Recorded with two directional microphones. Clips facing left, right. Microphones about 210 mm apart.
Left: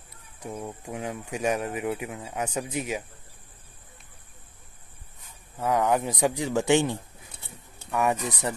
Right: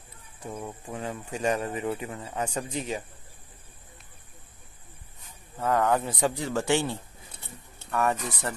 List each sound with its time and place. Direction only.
0.4 s speech: 10° left (ahead or behind)
5.6 s speech: 15° left (ahead or behind)